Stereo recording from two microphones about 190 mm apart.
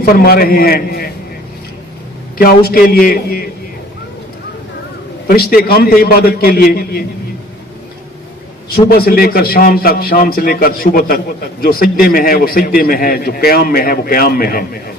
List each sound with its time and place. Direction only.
0.0 s a man's voice: 50° left (ahead or behind)
2.4 s a man's voice: 50° left (ahead or behind)
5.3 s a man's voice: 50° left (ahead or behind)
8.7 s a man's voice: 55° left (ahead or behind)